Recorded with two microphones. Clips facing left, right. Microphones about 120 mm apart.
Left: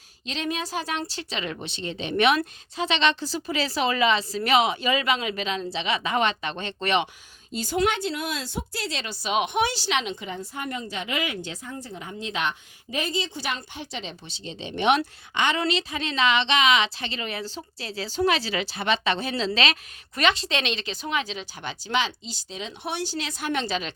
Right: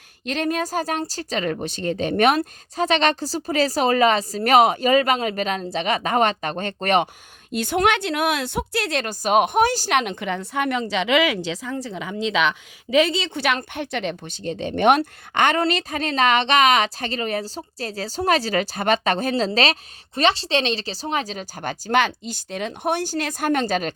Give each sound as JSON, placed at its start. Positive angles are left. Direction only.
{"t": 0.3, "sound": "speech", "side_deg": -50}
{"t": 7.5, "sound": "speech", "side_deg": -65}
{"t": 20.1, "sound": "speech", "side_deg": -30}